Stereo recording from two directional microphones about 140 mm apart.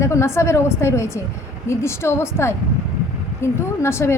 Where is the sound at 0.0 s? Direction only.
20° left (ahead or behind).